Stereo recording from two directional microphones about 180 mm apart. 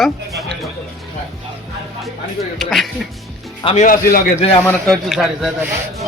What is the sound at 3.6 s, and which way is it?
Speech, 45° left (ahead or behind).